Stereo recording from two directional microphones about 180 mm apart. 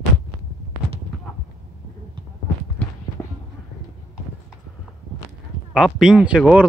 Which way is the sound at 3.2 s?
15° left (ahead or behind).